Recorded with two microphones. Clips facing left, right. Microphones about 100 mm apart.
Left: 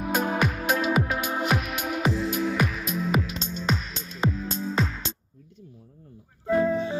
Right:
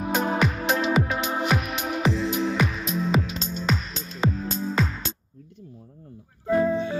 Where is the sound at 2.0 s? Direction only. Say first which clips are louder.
Right 2 dB; 15° left (ahead or behind).